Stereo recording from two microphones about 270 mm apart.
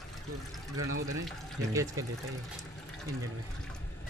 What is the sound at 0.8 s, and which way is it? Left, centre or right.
Speech, right.